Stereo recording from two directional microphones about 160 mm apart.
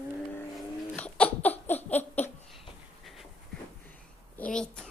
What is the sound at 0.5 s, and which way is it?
Laughter, 10° left (ahead or behind).